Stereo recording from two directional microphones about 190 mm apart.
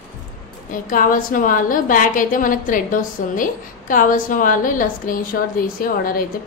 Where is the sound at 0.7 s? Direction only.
45° left (ahead or behind).